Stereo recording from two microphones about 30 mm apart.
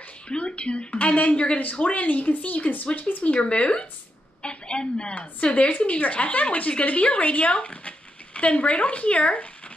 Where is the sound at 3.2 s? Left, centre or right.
Left.